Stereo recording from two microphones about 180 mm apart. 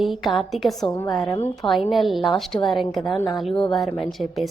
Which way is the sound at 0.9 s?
20° left (ahead or behind).